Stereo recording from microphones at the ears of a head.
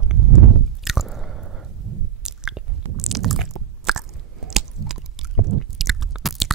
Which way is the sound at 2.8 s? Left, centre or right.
Right.